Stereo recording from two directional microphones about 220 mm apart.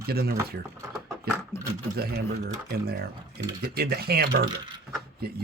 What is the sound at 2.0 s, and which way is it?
Speech, 45° right (ahead or behind).